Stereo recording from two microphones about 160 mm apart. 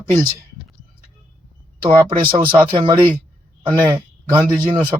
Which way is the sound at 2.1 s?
30° right (ahead or behind).